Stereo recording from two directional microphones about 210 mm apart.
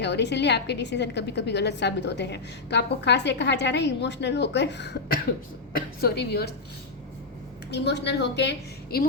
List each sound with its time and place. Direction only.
0.0 s a woman's voice: 55° left (ahead or behind)
7.7 s a woman's voice: 55° left (ahead or behind)